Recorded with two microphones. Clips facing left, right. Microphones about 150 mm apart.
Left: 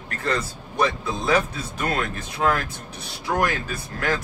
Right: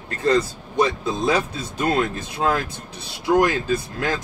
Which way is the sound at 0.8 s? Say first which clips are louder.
Right 3 dB; 20° right (ahead or behind).